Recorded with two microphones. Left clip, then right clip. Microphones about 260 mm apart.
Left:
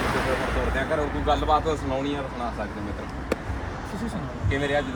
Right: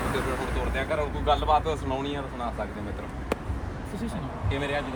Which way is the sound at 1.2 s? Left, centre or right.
Right.